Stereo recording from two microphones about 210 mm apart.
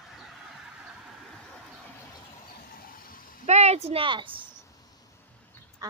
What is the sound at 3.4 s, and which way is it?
Speech, 30° right (ahead or behind).